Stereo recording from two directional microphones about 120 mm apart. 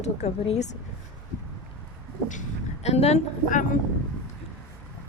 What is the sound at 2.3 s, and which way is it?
A woman's voice, 75° left (ahead or behind).